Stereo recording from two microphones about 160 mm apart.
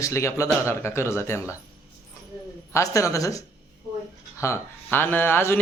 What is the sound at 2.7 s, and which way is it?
Speech, 20° left (ahead or behind).